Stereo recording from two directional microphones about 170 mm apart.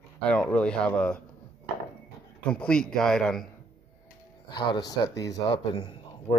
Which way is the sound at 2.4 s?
5° left (ahead or behind).